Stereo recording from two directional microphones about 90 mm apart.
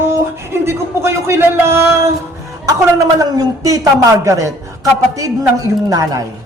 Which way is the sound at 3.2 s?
40° right (ahead or behind).